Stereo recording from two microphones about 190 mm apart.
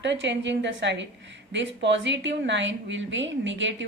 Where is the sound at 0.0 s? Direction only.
70° right (ahead or behind).